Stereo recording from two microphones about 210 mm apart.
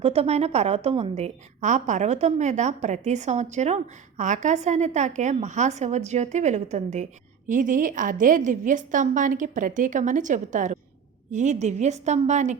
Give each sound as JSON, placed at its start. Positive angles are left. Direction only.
{"t": 0.0, "sound": "a woman's voice", "side_deg": -30}